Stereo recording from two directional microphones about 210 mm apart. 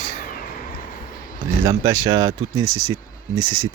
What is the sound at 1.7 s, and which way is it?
Speech, 15° right (ahead or behind).